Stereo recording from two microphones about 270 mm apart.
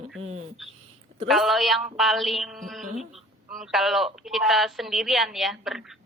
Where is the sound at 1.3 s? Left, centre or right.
Centre.